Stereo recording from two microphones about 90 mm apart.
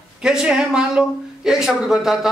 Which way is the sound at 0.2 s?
10° right (ahead or behind).